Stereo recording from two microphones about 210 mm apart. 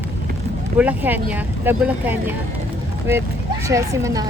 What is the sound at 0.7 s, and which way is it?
Speech, 10° right (ahead or behind).